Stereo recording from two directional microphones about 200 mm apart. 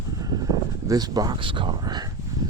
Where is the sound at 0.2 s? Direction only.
20° right (ahead or behind).